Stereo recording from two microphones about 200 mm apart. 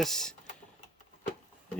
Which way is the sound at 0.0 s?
Centre (ahead or behind).